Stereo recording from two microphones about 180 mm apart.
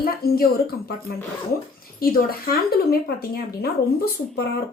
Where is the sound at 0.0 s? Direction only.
55° left (ahead or behind).